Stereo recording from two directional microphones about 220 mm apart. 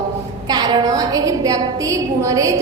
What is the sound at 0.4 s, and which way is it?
A woman's voice, 20° right (ahead or behind).